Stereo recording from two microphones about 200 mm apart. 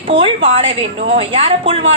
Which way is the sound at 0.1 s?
25° right (ahead or behind).